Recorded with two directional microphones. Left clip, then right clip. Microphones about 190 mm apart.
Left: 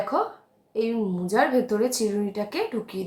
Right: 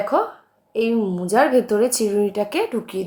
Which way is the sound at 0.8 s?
30° right (ahead or behind).